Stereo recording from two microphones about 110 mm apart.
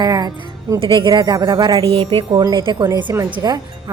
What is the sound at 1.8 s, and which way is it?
Wind chime, 60° right (ahead or behind).